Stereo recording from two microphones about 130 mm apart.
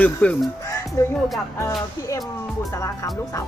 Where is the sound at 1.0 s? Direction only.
25° left (ahead or behind).